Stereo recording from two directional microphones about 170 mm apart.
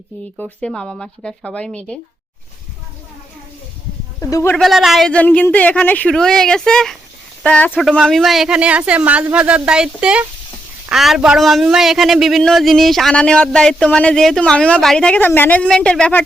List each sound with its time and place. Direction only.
0.6 s a man's voice: 5° left (ahead or behind)
4.2 s speech: 20° left (ahead or behind)
4.5 s a man's voice: centre (ahead or behind)